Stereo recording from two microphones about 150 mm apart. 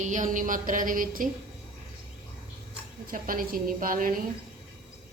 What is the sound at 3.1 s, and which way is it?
A woman's voice, 70° right (ahead or behind).